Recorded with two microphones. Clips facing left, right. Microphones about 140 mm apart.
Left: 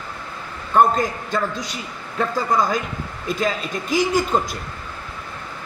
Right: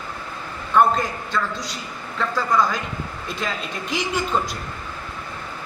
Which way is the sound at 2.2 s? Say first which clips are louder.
Left 1 dB; 45° left (ahead or behind).